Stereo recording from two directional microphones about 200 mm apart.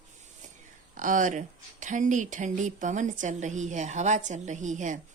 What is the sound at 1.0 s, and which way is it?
A woman's voice, 40° right (ahead or behind).